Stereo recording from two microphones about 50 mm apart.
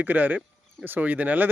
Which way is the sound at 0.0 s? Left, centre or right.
Right.